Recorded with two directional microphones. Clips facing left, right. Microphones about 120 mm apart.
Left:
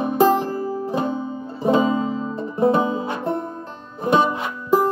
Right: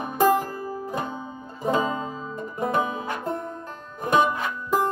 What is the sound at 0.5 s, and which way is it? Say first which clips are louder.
Music: left 7 dB; 30° left (ahead or behind).